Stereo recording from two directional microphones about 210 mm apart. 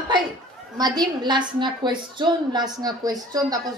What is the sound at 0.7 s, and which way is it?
A woman's voice, 20° right (ahead or behind).